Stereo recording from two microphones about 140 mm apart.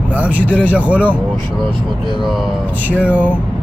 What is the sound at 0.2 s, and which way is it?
Speech, 10° right (ahead or behind).